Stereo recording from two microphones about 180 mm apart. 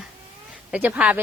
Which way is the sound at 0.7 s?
10° right (ahead or behind).